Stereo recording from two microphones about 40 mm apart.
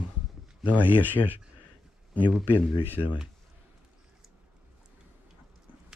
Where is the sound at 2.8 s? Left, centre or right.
Right.